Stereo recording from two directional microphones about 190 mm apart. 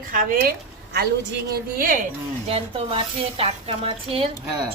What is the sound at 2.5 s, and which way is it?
A woman's voice, 30° right (ahead or behind).